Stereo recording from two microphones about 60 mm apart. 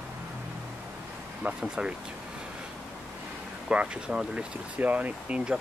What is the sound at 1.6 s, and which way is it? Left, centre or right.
Speech, centre.